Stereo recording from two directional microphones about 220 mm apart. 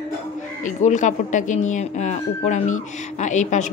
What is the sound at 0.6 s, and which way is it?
Speech, 35° left (ahead or behind).